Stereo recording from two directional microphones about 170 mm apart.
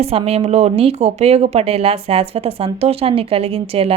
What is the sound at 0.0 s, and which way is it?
Speech, 35° right (ahead or behind).